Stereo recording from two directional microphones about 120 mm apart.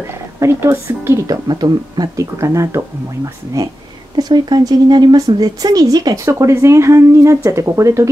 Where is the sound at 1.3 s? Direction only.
35° right (ahead or behind).